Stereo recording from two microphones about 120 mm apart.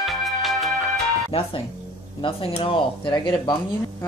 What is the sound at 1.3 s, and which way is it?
Speech, 50° left (ahead or behind).